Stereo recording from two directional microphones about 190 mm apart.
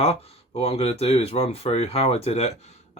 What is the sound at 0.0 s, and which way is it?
Speech, 30° left (ahead or behind).